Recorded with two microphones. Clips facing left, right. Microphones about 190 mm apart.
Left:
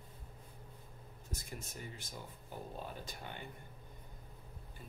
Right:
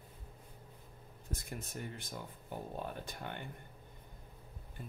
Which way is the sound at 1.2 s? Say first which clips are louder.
Right 3 dB; 55° right (ahead or behind).